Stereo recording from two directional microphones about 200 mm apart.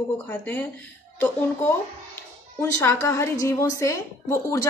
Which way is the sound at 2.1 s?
15° left (ahead or behind).